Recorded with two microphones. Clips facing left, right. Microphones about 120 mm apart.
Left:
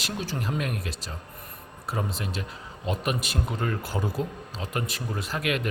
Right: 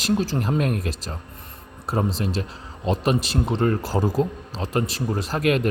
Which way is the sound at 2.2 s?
35° right (ahead or behind).